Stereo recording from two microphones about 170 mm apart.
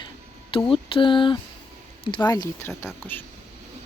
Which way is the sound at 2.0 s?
25° left (ahead or behind).